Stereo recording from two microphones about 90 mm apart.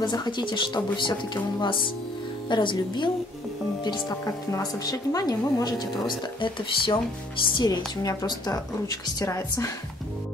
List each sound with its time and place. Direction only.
0.0 s speech: 55° left (ahead or behind)
4.5 s a woman's voice: 40° left (ahead or behind)
8.1 s a woman's voice: 40° left (ahead or behind)